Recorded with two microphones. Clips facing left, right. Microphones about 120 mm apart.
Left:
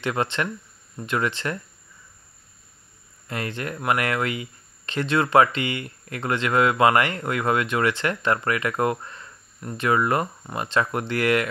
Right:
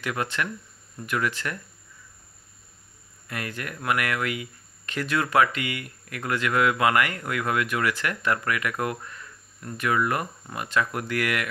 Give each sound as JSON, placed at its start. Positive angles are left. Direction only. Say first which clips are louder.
{"t": 0.0, "sound": "speech", "louder": "left 4 dB", "side_deg": 30}
{"t": 3.3, "sound": "speech", "louder": "left 4 dB", "side_deg": 30}